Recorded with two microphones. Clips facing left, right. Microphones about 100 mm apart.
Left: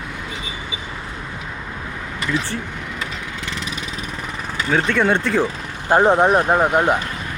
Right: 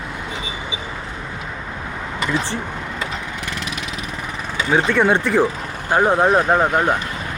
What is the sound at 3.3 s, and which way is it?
Vehicle, 10° right (ahead or behind).